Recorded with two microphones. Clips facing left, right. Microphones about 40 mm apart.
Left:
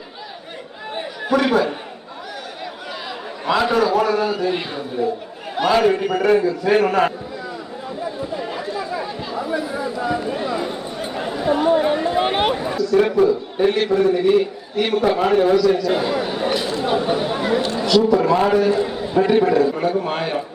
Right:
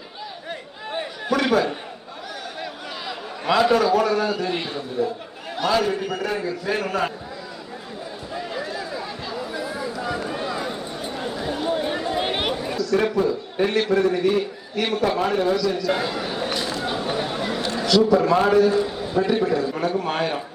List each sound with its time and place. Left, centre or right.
1.2 s a man's voice: centre
3.1 s a man's voice: centre
5.0 s a man's voice: centre
9.3 s a sound: centre
12.5 s a man's voice: centre
15.8 s a sound: centre
17.7 s a man's voice: centre
18.9 s a sound: centre
19.2 s a man's voice: centre
19.7 s a man's voice: centre